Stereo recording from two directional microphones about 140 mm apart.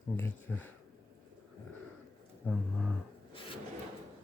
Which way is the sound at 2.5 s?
10° left (ahead or behind).